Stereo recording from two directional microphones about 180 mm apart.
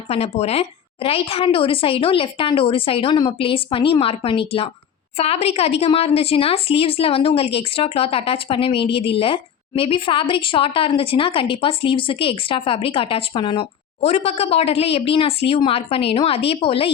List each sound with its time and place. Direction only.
0.1 s a woman's voice: 35° left (ahead or behind)